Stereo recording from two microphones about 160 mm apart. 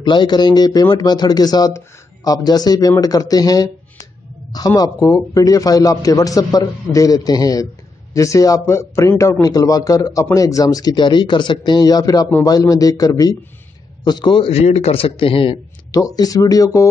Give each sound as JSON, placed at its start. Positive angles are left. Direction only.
{"t": 0.0, "sound": "a man's voice", "side_deg": 30}
{"t": 15.9, "sound": "a man's voice", "side_deg": 20}